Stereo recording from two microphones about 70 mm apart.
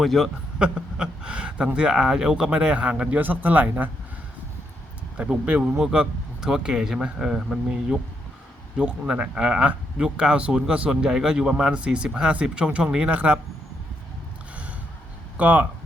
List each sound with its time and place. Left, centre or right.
0.0 s a man's voice: centre
0.6 s speech: centre
5.1 s speech: centre
15.4 s speech: right